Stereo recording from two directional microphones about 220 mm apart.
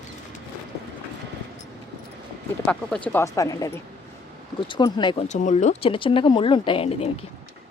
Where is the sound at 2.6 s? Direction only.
5° left (ahead or behind); by 7.2 s 25° left (ahead or behind).